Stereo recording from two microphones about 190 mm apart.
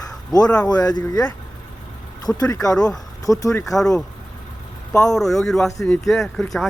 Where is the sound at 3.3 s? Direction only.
20° left (ahead or behind).